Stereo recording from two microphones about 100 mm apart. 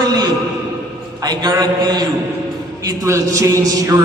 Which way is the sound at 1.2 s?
45° right (ahead or behind).